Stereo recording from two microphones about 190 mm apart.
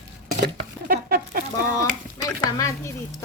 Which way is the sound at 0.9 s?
50° right (ahead or behind).